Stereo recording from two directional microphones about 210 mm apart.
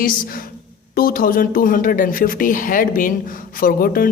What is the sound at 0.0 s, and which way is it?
A woman's voice, 40° left (ahead or behind).